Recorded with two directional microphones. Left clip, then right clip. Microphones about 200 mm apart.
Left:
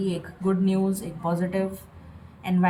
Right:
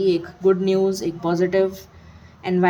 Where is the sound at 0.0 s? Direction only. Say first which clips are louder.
Right 10 dB; 50° right (ahead or behind).